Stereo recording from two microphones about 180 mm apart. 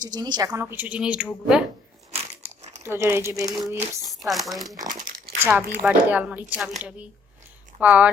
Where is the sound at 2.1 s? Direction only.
35° right (ahead or behind).